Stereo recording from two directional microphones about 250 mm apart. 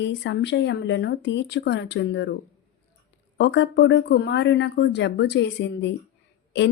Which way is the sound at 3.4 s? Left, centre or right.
Left.